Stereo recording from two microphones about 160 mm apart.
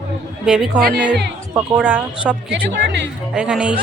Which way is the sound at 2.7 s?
90° right.